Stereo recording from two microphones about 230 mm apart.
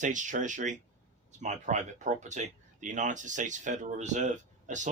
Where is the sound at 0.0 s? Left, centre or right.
Right.